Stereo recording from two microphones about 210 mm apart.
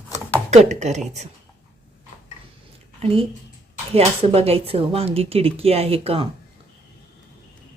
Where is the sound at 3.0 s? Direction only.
25° right (ahead or behind).